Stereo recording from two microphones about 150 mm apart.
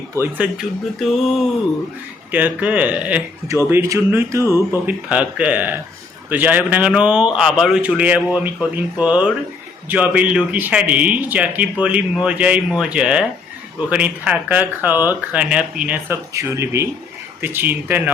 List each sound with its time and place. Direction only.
0.2 s speech: 10° right (ahead or behind)
2.3 s speech: 10° right (ahead or behind)
16.3 s speech: 20° right (ahead or behind)